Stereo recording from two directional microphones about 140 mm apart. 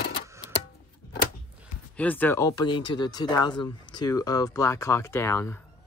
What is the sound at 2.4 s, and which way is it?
Speech, 30° left (ahead or behind).